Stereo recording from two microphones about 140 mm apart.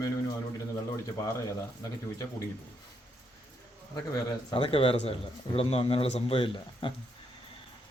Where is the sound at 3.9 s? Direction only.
25° left (ahead or behind).